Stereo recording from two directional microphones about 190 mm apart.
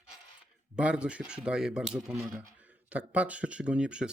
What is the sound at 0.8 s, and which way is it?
Speech, 5° right (ahead or behind).